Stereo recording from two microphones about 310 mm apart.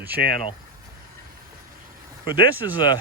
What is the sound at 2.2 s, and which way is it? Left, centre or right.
Speech, centre.